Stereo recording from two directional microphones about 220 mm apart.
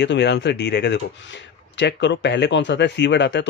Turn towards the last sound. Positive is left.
turn(degrees=50)  # may be behind; listen again after turning